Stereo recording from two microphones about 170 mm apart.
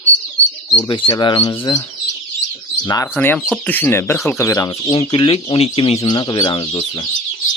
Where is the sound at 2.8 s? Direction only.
20° left (ahead or behind).